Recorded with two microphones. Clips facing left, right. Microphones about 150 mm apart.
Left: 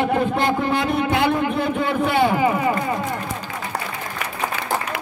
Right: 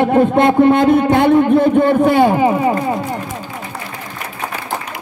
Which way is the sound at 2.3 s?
30° right (ahead or behind).